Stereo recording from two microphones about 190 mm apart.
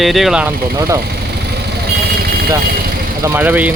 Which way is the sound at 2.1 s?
55° right (ahead or behind).